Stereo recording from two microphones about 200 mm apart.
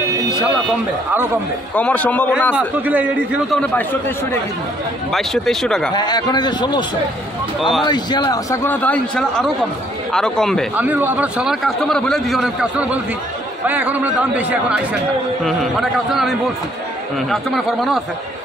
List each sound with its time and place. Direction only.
1.8 s a man's voice: 5° left (ahead or behind)
2.5 s a man's voice: 10° right (ahead or behind)
5.1 s a man's voice: centre (ahead or behind)
5.9 s a man's voice: 20° left (ahead or behind)
7.8 s a man's voice: 20° left (ahead or behind); by 10.7 s centre (ahead or behind)
10.8 s a man's voice: 10° right (ahead or behind)